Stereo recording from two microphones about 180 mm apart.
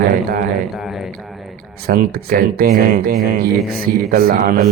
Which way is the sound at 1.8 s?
55° right (ahead or behind).